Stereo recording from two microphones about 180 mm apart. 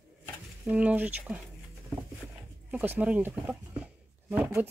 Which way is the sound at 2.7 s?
10° right (ahead or behind).